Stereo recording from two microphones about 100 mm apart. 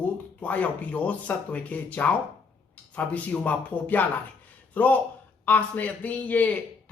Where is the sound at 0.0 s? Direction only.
15° left (ahead or behind).